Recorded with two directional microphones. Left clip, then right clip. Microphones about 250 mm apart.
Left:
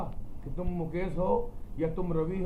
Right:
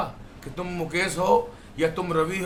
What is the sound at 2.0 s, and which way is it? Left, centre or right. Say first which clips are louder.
Speech: right 8 dB; centre.